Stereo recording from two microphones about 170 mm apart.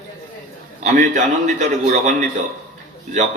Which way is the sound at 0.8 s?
45° right (ahead or behind).